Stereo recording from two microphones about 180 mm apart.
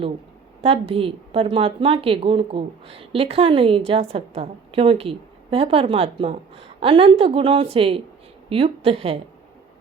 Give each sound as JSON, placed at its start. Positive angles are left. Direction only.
{"t": 0.6, "sound": "a woman's voice", "side_deg": -30}